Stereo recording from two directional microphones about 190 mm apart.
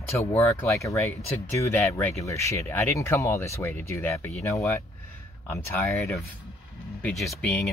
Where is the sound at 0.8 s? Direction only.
15° left (ahead or behind).